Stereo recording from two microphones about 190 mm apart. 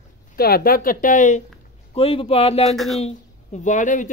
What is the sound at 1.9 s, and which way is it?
A man's voice, 30° left (ahead or behind).